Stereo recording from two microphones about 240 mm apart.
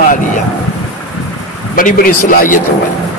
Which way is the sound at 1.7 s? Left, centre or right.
Left.